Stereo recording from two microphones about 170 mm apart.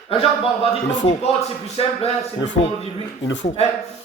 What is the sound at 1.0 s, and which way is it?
Speech, 40° left (ahead or behind).